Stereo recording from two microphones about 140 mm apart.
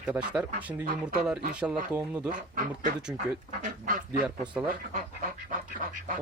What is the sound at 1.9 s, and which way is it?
Speech, 10° right (ahead or behind).